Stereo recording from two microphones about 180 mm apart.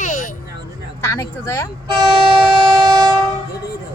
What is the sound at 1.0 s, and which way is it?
Speech, 15° left (ahead or behind).